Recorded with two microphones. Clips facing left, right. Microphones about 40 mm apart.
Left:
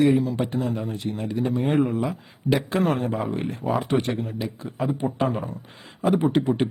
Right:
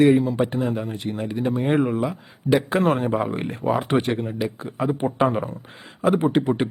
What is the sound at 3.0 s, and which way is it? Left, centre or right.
Speech, right.